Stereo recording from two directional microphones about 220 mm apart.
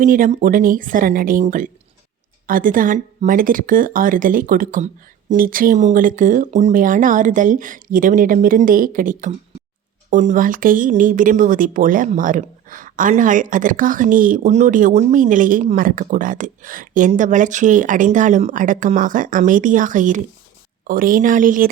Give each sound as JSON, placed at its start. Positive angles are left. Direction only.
{"t": 0.0, "sound": "speech", "side_deg": -35}